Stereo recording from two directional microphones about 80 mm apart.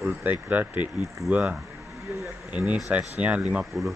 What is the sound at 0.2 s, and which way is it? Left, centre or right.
Speech, centre.